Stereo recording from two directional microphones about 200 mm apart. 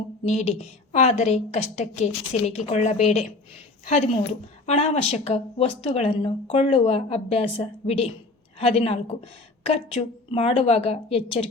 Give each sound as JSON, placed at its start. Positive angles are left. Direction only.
{"t": 0.3, "sound": "a woman's voice", "side_deg": 35}